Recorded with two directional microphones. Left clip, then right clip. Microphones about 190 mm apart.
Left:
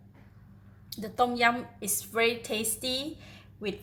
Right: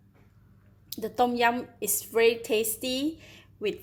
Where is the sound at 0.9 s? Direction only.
40° right (ahead or behind).